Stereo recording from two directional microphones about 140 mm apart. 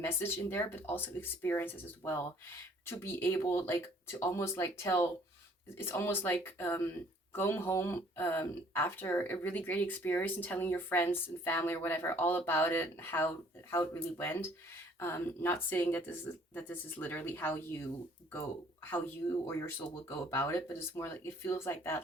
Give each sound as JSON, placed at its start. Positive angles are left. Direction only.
{"t": 0.0, "sound": "speech", "side_deg": 15}
{"t": 18.9, "sound": "speech", "side_deg": 15}